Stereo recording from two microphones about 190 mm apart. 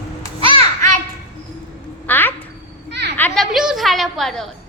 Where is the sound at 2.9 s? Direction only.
65° right (ahead or behind).